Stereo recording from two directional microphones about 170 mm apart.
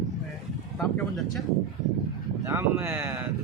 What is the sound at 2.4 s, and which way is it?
Speech, 15° right (ahead or behind).